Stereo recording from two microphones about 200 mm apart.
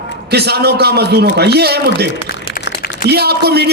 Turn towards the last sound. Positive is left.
turn(degrees=-55)  # may be behind; listen again after turning